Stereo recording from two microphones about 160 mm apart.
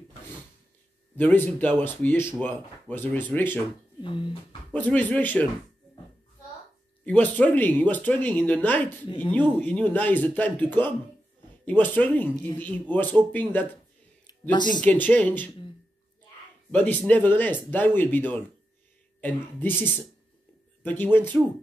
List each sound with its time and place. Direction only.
1.1 s speech: 10° left (ahead or behind)
4.0 s speech: 30° left (ahead or behind)
4.7 s speech: 10° left (ahead or behind)
7.1 s speech: 10° left (ahead or behind)
14.5 s speech: 30° left (ahead or behind)
14.8 s speech: 10° left (ahead or behind)
16.7 s speech: 10° left (ahead or behind)
20.8 s speech: 10° left (ahead or behind)